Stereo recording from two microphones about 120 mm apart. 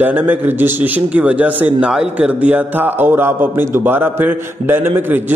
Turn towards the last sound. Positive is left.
turn(degrees=-20)  # may be behind; listen again after turning